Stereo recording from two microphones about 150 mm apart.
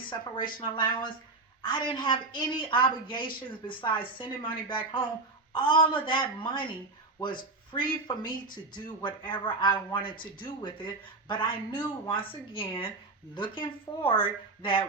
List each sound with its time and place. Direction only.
0.1 s speech: 30° left (ahead or behind)